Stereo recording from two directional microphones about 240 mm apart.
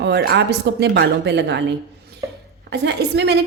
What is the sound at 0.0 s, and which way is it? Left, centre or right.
A woman's voice, right.